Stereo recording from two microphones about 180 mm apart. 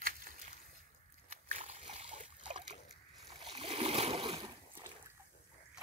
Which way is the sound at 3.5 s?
30° right (ahead or behind).